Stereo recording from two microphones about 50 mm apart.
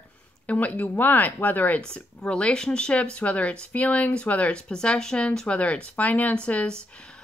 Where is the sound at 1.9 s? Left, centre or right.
Centre.